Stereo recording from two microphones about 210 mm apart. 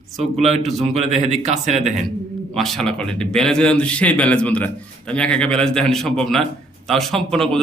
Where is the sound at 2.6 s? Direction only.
Centre (ahead or behind).